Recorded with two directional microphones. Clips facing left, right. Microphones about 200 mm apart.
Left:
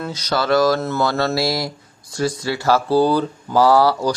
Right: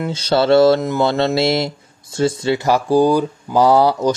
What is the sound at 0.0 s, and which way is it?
Speech, 25° right (ahead or behind).